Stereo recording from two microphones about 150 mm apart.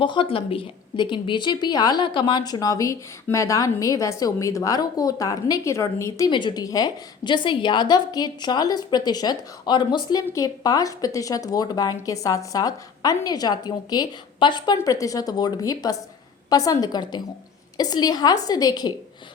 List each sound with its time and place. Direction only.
0.0 s a woman's voice: 35° left (ahead or behind)